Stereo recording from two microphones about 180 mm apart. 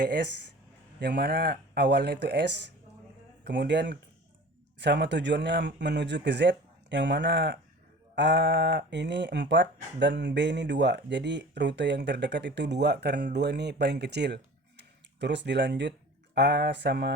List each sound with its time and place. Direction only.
0.0 s speech: 70° right (ahead or behind)